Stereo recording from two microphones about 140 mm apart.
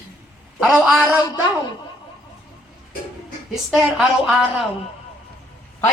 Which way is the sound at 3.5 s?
Centre (ahead or behind).